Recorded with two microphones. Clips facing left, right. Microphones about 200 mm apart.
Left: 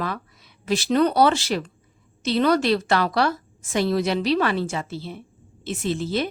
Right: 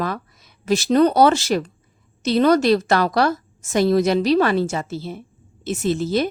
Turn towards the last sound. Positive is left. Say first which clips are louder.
# right 4 dB
turn(degrees=-40)  # may be behind; listen again after turning